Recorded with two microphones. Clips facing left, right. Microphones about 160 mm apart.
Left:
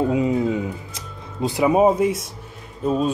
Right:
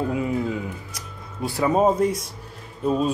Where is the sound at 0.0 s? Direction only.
20° left (ahead or behind); by 2.2 s 5° left (ahead or behind).